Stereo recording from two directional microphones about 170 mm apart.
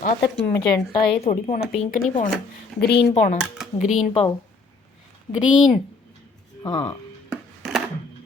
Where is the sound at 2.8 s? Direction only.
75° left (ahead or behind).